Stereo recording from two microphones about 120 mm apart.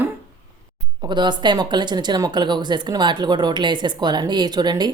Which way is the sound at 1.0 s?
40° right (ahead or behind).